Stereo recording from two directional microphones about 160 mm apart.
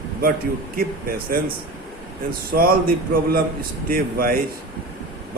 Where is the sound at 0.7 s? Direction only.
65° right (ahead or behind).